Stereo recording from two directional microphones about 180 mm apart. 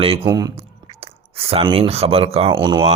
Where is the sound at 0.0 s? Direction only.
30° right (ahead or behind).